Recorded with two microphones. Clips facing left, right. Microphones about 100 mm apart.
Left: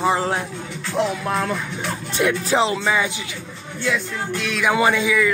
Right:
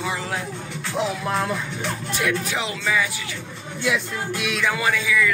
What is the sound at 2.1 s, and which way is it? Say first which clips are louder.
Music: left 7 dB; 30° left (ahead or behind).